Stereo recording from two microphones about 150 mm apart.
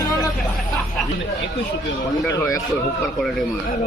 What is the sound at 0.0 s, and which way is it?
Music, 25° left (ahead or behind).